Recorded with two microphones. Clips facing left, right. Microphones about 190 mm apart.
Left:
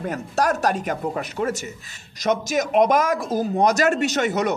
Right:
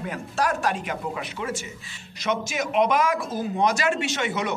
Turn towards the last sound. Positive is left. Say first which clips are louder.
# left 5 dB
turn(degrees=40)  # may be behind; listen again after turning